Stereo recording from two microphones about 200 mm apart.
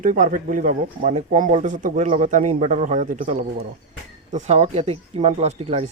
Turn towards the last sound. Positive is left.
turn(degrees=-30)  # may be behind; listen again after turning